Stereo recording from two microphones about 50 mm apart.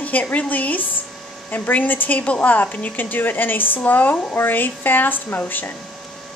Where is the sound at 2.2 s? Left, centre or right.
Left.